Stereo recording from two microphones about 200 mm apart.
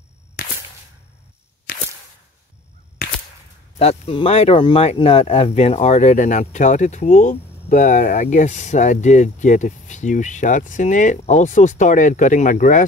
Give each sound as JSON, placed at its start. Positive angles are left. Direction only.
{"t": 3.7, "sound": "speech", "side_deg": 30}